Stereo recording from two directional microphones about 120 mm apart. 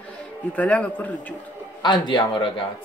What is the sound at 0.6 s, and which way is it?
Speech, 10° left (ahead or behind).